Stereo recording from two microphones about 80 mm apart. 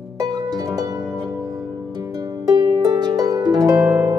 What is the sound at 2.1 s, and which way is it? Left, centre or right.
Harp, right.